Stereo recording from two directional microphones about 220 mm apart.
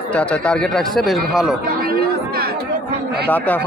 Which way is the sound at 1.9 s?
45° right (ahead or behind).